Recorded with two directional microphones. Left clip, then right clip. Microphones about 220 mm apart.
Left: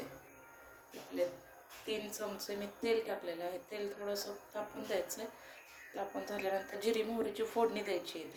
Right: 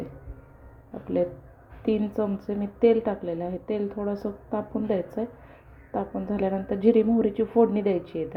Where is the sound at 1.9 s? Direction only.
20° right (ahead or behind).